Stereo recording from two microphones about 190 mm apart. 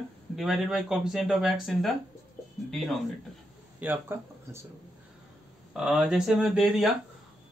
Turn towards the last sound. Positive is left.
turn(degrees=0)  # may be behind; listen again after turning